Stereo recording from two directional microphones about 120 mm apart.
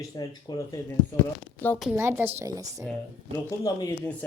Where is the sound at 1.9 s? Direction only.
20° right (ahead or behind).